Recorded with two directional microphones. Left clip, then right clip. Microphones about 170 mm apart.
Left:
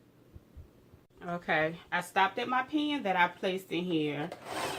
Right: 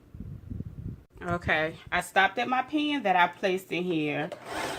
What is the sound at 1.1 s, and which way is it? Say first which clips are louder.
Speech: right 3 dB; 65° right (ahead or behind).